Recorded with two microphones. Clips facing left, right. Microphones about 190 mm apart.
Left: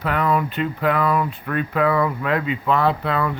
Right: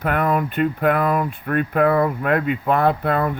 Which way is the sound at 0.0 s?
50° right (ahead or behind).